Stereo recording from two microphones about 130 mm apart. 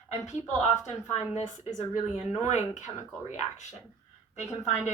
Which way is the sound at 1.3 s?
70° left (ahead or behind).